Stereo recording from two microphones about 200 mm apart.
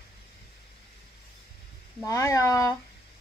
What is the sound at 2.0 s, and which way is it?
Speech, 15° left (ahead or behind).